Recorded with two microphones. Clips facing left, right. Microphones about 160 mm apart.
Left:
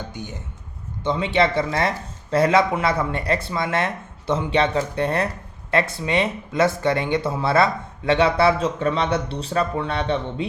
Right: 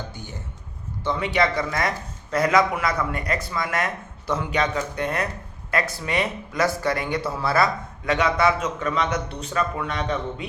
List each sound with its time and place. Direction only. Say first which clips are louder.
0.1 s speech: left 4 dB; 20° left (ahead or behind)